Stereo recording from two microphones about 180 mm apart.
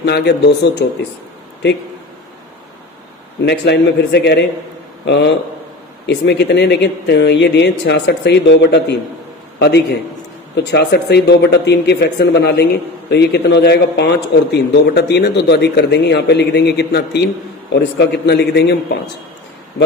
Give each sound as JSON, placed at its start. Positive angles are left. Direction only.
{"t": 0.0, "sound": "speech", "side_deg": 70}
{"t": 3.4, "sound": "speech", "side_deg": 70}